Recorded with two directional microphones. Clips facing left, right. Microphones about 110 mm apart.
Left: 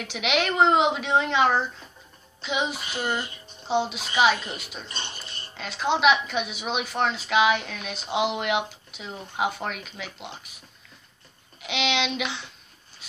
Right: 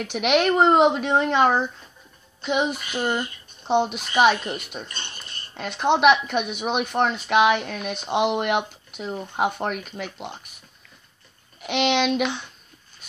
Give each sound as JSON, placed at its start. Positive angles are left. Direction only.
{"t": 0.0, "sound": "a woman's voice", "side_deg": -50}
{"t": 3.0, "sound": "speech", "side_deg": -20}
{"t": 3.6, "sound": "a woman's voice", "side_deg": -55}
{"t": 4.8, "sound": "speech", "side_deg": 20}
{"t": 5.6, "sound": "a woman's voice", "side_deg": -55}
{"t": 11.6, "sound": "a woman's voice", "side_deg": -50}